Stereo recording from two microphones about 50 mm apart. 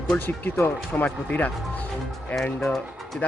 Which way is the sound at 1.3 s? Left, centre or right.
Left.